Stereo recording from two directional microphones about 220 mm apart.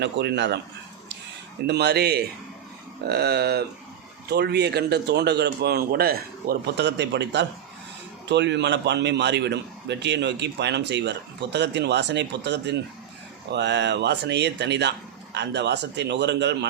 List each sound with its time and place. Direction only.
0.0 s speech: 50° right (ahead or behind)
1.6 s speech: 50° right (ahead or behind)